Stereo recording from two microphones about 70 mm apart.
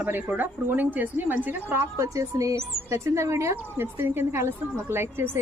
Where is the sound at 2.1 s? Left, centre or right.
Right.